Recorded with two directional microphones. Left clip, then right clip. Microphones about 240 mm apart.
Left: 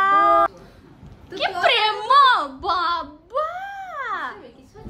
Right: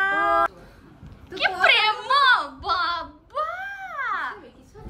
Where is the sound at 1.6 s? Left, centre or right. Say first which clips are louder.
Even; centre.